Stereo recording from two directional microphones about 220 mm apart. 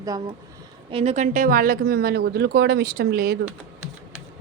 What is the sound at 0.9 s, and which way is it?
A woman's voice, 25° right (ahead or behind).